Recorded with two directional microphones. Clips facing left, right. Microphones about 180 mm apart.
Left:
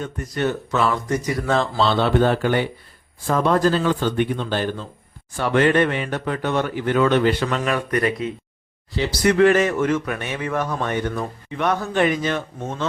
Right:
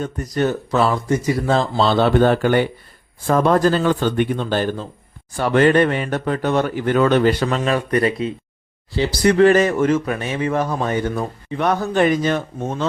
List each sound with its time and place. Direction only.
0.0 s a man's voice: 40° right (ahead or behind)